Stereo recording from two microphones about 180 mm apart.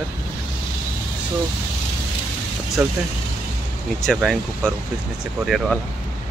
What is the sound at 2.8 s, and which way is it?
Speech, 10° right (ahead or behind).